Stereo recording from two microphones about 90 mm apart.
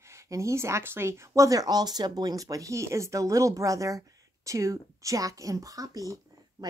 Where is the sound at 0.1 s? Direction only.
35° right (ahead or behind).